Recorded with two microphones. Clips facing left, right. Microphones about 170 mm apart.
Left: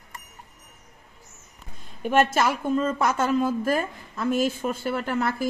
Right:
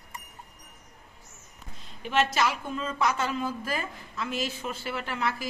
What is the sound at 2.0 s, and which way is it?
A woman's voice, 50° left (ahead or behind).